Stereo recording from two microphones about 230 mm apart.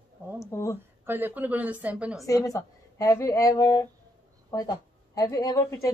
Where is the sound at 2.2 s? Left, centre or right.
Centre.